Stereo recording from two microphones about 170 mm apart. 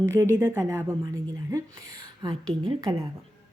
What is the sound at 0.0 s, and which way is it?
A woman's voice, 15° right (ahead or behind).